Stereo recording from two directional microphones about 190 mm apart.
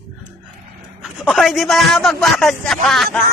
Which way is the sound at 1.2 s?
Centre (ahead or behind).